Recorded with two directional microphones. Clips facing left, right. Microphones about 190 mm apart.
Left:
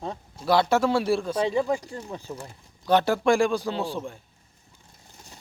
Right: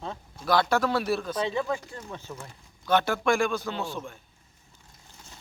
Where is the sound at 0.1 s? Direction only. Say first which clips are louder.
Left 3 dB; 30° left (ahead or behind).